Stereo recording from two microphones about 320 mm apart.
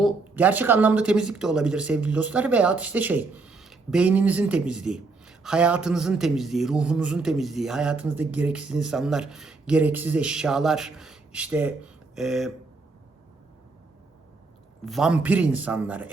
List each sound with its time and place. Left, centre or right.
0.0 s speech: centre
14.8 s speech: centre